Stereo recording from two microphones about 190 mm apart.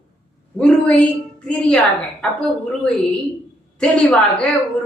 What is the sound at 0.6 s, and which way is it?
Speech, 5° left (ahead or behind).